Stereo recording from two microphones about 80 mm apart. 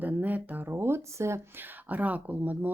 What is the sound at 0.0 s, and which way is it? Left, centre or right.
Speech, right.